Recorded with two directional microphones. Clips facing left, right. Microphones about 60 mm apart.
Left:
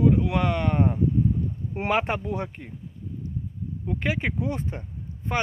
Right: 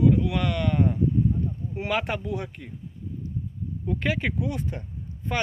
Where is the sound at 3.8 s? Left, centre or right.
Centre.